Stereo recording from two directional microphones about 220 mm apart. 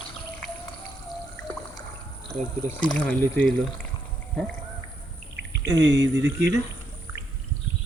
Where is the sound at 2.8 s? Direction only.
5° left (ahead or behind).